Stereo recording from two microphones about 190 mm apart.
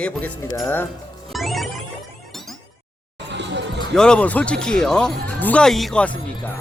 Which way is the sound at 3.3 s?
65° right (ahead or behind).